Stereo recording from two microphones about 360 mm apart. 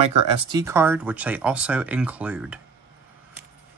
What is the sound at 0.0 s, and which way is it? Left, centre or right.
Speech, centre.